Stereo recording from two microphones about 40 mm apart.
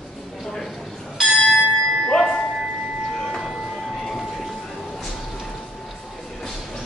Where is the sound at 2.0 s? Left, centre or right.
Centre.